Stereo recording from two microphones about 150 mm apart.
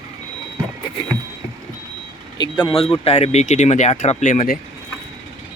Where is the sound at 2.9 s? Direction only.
45° left (ahead or behind); by 4.5 s 65° left (ahead or behind).